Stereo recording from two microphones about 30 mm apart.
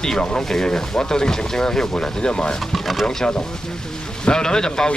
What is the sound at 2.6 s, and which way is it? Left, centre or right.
Speech, centre.